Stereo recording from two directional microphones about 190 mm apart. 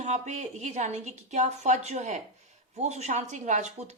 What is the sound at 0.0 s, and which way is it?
A woman's voice, 40° right (ahead or behind).